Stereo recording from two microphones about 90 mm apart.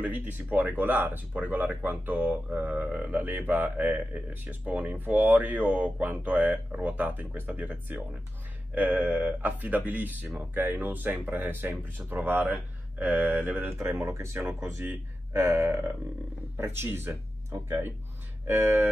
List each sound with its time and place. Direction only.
0.0 s speech: 20° right (ahead or behind)